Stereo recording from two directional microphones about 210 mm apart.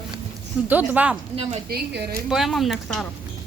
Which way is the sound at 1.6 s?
50° right (ahead or behind).